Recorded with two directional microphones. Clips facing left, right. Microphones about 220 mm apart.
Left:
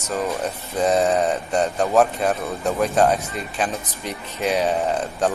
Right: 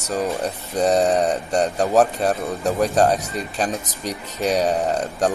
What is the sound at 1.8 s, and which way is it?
A man's voice, 35° right (ahead or behind).